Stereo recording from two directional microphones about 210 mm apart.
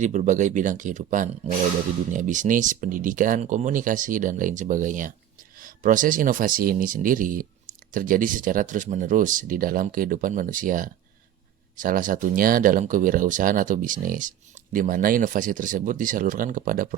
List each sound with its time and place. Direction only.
0.0 s speech: 35° right (ahead or behind)